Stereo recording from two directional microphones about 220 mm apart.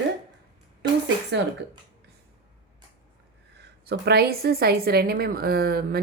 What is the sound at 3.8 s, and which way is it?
Speech, 45° right (ahead or behind).